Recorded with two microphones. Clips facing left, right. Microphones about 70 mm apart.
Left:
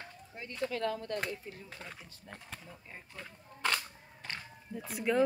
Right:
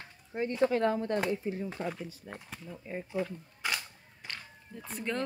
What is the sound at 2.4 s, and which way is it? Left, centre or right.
Camera, centre.